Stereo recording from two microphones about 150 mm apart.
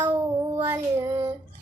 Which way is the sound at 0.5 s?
15° right (ahead or behind).